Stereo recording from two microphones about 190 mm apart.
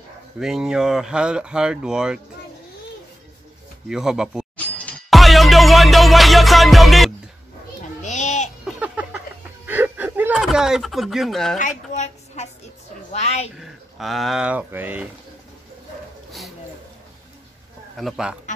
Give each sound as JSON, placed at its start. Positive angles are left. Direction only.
{"t": 0.4, "sound": "speech", "side_deg": -5}
{"t": 3.9, "sound": "speech", "side_deg": -5}
{"t": 4.7, "sound": "music", "side_deg": 5}
{"t": 8.0, "sound": "a sound", "side_deg": 40}
{"t": 8.6, "sound": "a sound", "side_deg": -5}
{"t": 11.5, "sound": "a woman's voice", "side_deg": 40}
{"t": 13.6, "sound": "speech", "side_deg": 0}
{"t": 17.9, "sound": "speech", "side_deg": 0}